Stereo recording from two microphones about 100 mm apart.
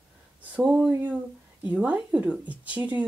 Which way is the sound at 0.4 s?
15° right (ahead or behind).